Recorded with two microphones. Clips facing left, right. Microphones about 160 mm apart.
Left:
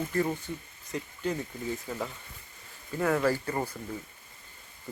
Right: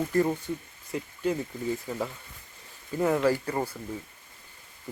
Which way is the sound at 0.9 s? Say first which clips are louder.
Right 3 dB; 10° right (ahead or behind).